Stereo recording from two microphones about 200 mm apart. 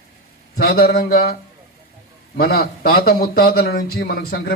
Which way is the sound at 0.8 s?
50° left (ahead or behind).